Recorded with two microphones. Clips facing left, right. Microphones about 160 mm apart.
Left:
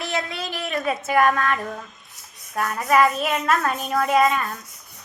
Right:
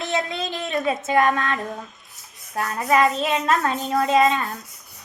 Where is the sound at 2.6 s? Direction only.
20° right (ahead or behind).